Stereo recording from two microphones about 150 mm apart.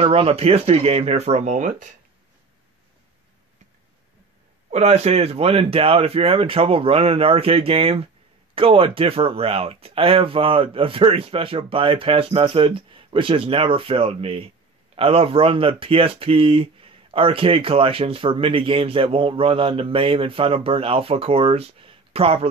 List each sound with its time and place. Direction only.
0.0 s speech: 40° right (ahead or behind)
4.6 s speech: 45° right (ahead or behind)